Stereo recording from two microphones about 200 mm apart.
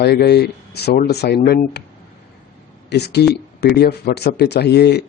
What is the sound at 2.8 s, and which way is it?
Speech, 55° left (ahead or behind).